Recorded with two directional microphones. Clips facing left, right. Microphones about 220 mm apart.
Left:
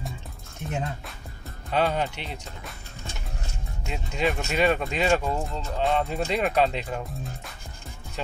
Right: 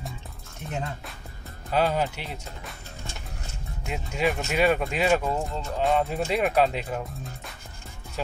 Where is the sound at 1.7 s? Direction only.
5° right (ahead or behind).